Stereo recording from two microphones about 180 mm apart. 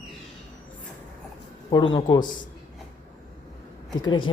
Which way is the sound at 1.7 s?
25° left (ahead or behind).